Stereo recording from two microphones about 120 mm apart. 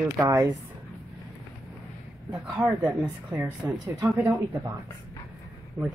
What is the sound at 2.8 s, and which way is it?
Speech, 20° right (ahead or behind).